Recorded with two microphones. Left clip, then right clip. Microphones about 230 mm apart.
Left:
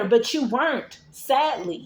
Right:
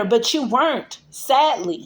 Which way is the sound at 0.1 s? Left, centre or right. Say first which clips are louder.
Right 1 dB; right.